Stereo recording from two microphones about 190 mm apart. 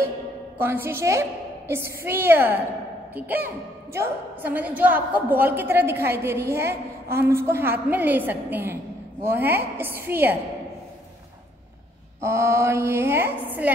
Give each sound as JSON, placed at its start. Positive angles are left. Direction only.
{"t": 0.6, "sound": "a woman's voice", "side_deg": -10}
{"t": 12.2, "sound": "a woman's voice", "side_deg": -15}